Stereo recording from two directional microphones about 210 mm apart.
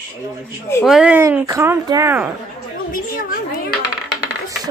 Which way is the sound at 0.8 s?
Centre (ahead or behind).